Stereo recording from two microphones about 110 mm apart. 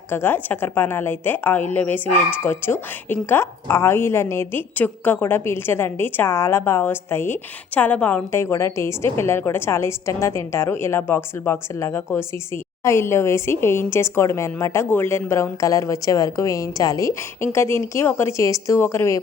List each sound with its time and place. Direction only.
0.1 s a woman's voice: 20° left (ahead or behind)